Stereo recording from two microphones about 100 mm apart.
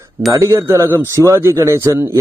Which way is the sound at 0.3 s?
30° right (ahead or behind).